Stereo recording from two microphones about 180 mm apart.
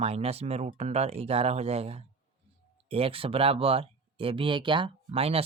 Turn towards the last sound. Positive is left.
turn(degrees=-30)  # may be behind; listen again after turning